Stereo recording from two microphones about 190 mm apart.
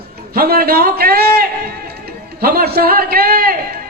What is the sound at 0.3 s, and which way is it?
A man's voice, 55° right (ahead or behind).